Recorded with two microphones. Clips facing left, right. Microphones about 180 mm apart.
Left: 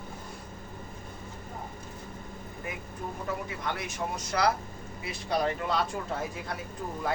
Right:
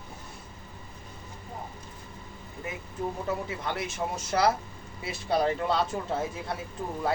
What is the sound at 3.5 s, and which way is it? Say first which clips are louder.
Speech: right 2 dB; 30° right (ahead or behind).